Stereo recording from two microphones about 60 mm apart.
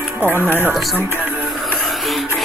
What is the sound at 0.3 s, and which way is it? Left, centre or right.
Speech, right.